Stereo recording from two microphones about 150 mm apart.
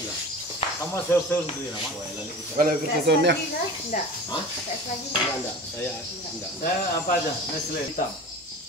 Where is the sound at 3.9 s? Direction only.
55° left (ahead or behind).